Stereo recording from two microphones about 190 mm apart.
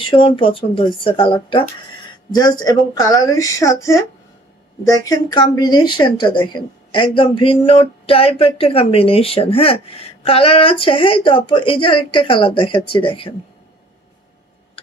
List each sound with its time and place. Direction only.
0.0 s a woman's voice: 25° left (ahead or behind)